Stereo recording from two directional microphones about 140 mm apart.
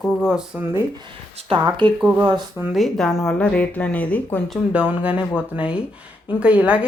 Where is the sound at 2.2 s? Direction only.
30° right (ahead or behind).